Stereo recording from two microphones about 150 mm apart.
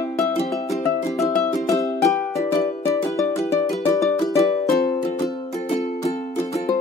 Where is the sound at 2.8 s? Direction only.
20° left (ahead or behind).